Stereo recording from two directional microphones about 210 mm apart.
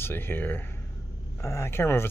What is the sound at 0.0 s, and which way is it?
Speech, 10° left (ahead or behind).